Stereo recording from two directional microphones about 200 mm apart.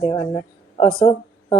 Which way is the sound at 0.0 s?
20° left (ahead or behind).